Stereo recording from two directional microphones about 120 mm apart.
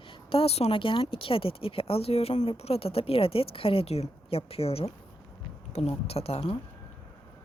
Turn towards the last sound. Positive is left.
turn(degrees=55)  # may be behind; listen again after turning